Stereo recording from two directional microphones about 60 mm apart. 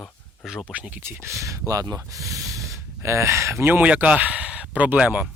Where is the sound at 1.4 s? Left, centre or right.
Right.